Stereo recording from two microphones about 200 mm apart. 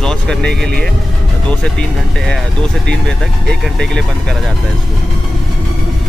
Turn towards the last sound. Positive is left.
turn(degrees=0)  # may be behind; listen again after turning